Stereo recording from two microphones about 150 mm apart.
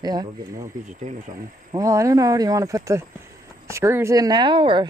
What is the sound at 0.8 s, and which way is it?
Speech, 55° right (ahead or behind).